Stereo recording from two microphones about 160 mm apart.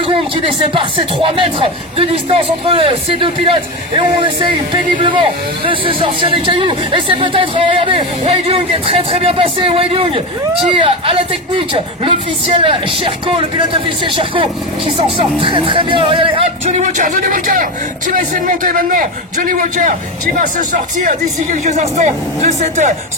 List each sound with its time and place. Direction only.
0.4 s speech: 30° right (ahead or behind)
16.8 s a man's voice: 50° right (ahead or behind)